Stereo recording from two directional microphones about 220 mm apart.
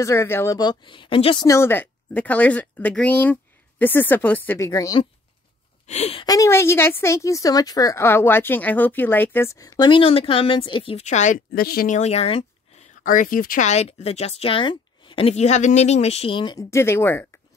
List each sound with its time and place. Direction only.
0.0 s a woman's voice: 10° left (ahead or behind)
5.9 s a woman's voice: 30° left (ahead or behind)
13.0 s speech: 35° left (ahead or behind); by 17.3 s 10° left (ahead or behind)